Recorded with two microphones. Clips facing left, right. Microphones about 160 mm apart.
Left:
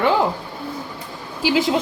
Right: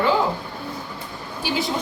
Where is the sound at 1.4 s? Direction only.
90° left.